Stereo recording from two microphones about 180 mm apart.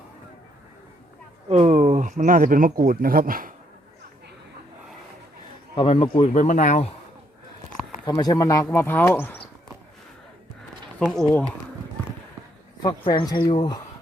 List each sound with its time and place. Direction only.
1.5 s speech: 35° right (ahead or behind); by 3.5 s 50° right (ahead or behind)
5.7 s speech: 30° left (ahead or behind)
8.0 s speech: 20° left (ahead or behind)
11.0 s speech: 5° left (ahead or behind)
12.8 s speech: 20° left (ahead or behind)